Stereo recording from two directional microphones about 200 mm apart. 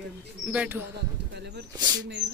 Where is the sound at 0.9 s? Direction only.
55° right (ahead or behind).